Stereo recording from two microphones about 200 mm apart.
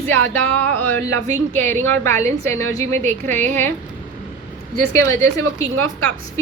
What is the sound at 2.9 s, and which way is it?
Speech, 35° right (ahead or behind).